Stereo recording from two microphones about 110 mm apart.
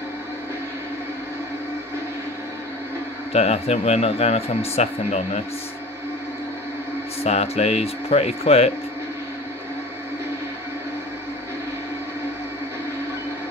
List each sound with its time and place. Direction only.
3.3 s speech: 75° left (ahead or behind)
7.2 s speech: 75° left (ahead or behind)